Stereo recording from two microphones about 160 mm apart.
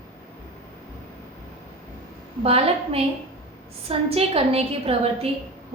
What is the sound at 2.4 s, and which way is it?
A woman's voice, 40° right (ahead or behind).